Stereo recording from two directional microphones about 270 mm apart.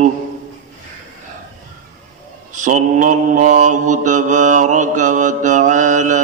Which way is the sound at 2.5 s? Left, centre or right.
Right.